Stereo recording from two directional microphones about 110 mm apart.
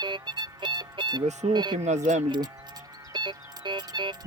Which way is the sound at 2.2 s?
45° right (ahead or behind).